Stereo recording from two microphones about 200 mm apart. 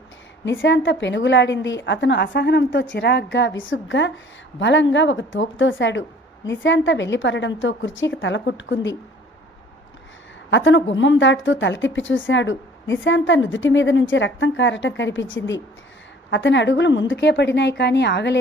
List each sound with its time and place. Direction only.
0.4 s a woman's voice: 70° left (ahead or behind)
10.5 s a woman's voice: 70° left (ahead or behind)